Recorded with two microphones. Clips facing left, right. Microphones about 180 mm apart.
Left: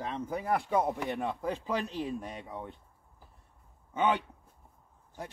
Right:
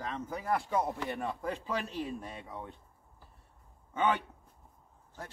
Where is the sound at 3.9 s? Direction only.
15° left (ahead or behind).